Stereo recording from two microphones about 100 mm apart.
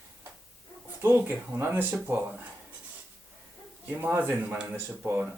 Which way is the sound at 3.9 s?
20° right (ahead or behind).